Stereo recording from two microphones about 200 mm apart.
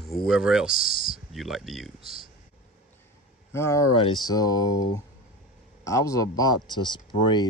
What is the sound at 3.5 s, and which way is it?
Speech, 15° left (ahead or behind).